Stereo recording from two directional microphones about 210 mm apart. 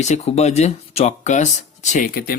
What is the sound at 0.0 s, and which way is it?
Speech, 30° left (ahead or behind).